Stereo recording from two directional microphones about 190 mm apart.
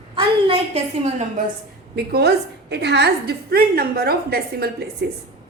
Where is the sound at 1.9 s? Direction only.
60° right (ahead or behind).